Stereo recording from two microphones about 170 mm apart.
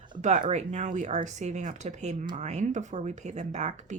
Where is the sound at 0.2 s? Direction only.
45° right (ahead or behind).